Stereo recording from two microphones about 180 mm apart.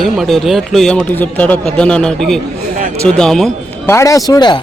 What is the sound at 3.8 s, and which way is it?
Speech, 15° left (ahead or behind).